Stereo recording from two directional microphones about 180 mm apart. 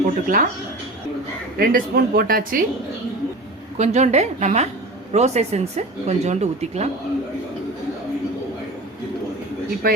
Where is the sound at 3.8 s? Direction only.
40° right (ahead or behind).